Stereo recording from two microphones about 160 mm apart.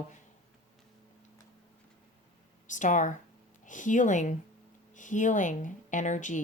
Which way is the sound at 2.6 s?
50° left (ahead or behind).